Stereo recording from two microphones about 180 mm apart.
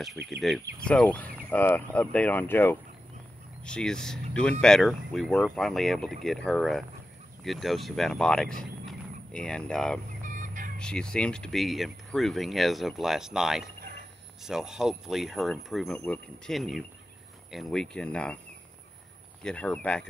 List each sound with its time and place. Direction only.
0.8 s speech: 5° left (ahead or behind)
10.0 s fowl: 45° right (ahead or behind)
10.8 s speech: 5° left (ahead or behind)
19.4 s speech: 5° left (ahead or behind)